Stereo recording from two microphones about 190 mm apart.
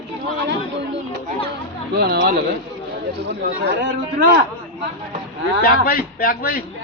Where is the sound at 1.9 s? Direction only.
60° right (ahead or behind).